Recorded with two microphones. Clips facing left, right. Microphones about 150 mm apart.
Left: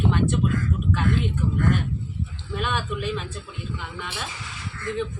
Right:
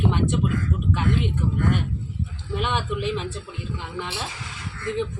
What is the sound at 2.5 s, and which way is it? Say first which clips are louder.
Speech: right 2 dB; 20° right (ahead or behind).